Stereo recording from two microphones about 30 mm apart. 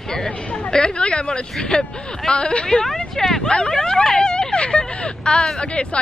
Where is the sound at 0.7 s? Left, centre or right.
Left.